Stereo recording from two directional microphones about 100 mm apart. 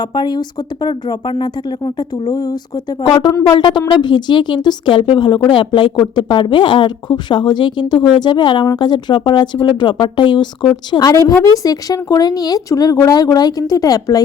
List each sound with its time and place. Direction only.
0.0 s a woman's voice: 45° left (ahead or behind)
10.9 s speech: 35° left (ahead or behind)